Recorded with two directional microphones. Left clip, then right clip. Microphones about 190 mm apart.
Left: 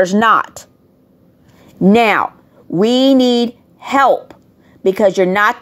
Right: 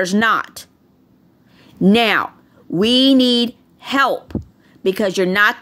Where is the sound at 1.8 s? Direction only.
10° right (ahead or behind).